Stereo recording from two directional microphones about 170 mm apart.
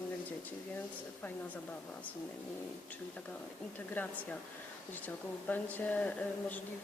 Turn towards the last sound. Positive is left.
turn(degrees=10)  # may be behind; listen again after turning